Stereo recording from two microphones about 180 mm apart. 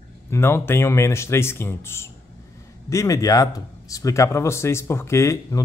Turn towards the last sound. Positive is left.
turn(degrees=15)  # may be behind; listen again after turning